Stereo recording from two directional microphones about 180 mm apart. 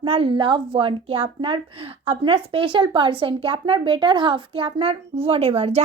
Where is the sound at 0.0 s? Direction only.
30° right (ahead or behind).